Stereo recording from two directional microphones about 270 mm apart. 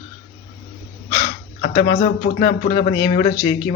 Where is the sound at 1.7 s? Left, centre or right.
Left.